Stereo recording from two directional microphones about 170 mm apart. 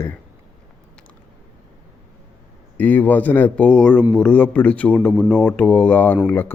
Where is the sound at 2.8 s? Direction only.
10° left (ahead or behind).